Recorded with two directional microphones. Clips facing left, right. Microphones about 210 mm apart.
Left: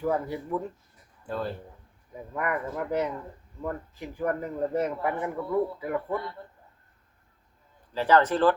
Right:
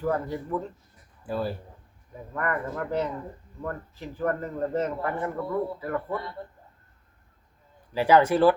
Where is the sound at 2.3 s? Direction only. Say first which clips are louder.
Even; 10° left (ahead or behind).